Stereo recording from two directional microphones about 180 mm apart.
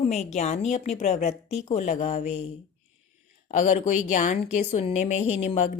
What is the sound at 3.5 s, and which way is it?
A woman's voice, 45° left (ahead or behind).